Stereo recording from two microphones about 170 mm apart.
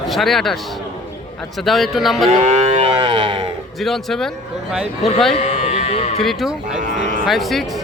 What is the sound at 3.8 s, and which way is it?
Speech, centre (ahead or behind).